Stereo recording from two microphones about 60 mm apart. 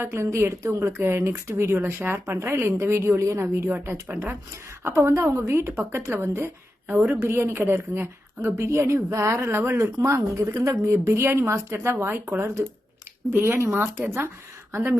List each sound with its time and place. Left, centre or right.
0.0 s a woman's voice: right
4.1 s speech: right
4.8 s a woman's voice: right
10.0 s a woman's voice: right
13.3 s speech: right